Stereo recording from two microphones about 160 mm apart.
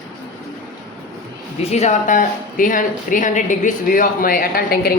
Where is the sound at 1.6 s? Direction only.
45° left (ahead or behind).